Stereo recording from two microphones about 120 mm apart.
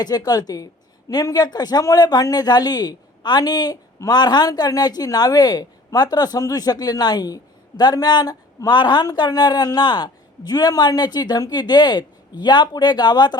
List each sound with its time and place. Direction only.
0.0 s speech: 35° left (ahead or behind)